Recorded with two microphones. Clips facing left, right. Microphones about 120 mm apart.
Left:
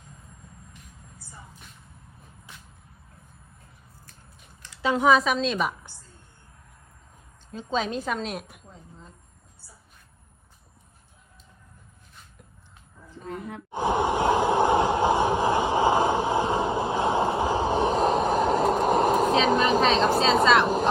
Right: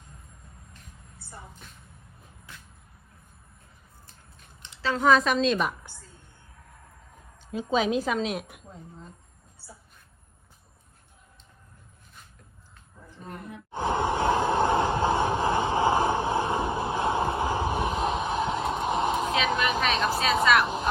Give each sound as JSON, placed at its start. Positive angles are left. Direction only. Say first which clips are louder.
{"t": 4.8, "sound": "a woman's voice", "louder": "left 1 dB", "side_deg": 15}
{"t": 7.5, "sound": "a woman's voice", "louder": "right 3 dB", "side_deg": -5}
{"t": 13.7, "sound": "a sound", "louder": "left 2 dB", "side_deg": 15}
{"t": 20.1, "sound": "vehicle", "louder": "left 3 dB", "side_deg": 25}